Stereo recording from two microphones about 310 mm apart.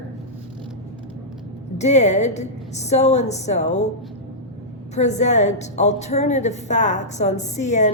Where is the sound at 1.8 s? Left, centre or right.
Left.